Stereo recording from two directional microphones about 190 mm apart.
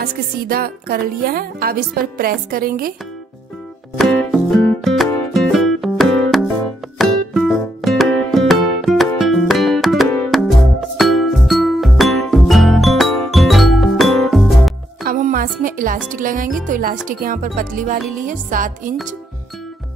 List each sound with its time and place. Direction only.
0.0 s speech: 50° right (ahead or behind)
4.0 s music: 5° left (ahead or behind)
15.0 s music: 45° right (ahead or behind)
16.1 s speech: 45° right (ahead or behind)